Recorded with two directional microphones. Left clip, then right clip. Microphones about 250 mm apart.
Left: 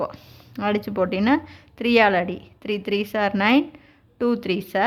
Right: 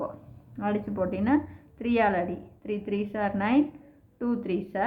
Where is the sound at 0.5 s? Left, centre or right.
Left.